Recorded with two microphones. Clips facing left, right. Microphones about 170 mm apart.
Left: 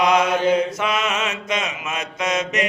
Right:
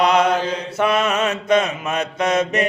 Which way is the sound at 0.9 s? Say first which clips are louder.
Right 4 dB; 35° right (ahead or behind).